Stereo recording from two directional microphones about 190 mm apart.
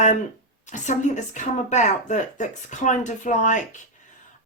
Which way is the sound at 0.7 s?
40° left (ahead or behind).